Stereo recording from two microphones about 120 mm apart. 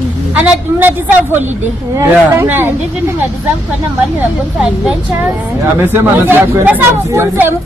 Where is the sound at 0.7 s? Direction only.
15° right (ahead or behind).